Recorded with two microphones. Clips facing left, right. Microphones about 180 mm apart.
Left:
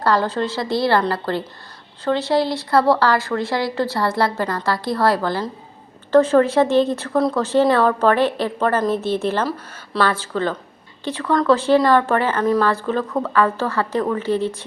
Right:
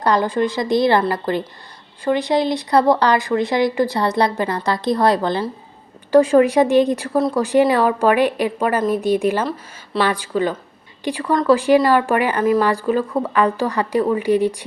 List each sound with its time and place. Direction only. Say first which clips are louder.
0.0 s speech: right 2 dB; 15° right (ahead or behind)